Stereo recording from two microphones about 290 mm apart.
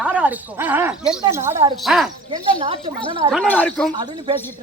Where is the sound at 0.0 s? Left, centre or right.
Centre.